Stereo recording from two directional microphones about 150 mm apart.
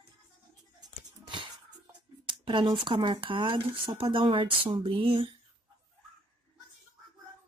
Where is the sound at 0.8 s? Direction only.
35° right (ahead or behind).